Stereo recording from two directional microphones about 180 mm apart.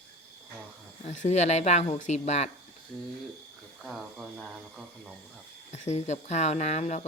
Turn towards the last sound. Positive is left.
turn(degrees=40)  # may be behind; listen again after turning